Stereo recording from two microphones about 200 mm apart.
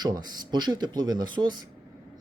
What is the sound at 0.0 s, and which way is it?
A man's voice, 20° right (ahead or behind).